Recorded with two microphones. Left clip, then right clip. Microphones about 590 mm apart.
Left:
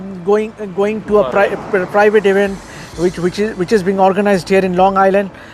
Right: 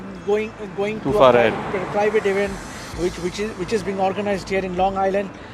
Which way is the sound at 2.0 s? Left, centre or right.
Left.